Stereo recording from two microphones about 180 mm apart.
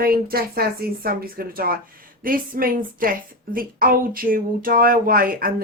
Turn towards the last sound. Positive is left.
turn(degrees=-50)  # may be behind; listen again after turning